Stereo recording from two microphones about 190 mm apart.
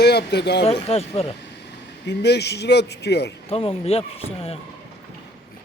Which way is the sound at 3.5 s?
30° left (ahead or behind).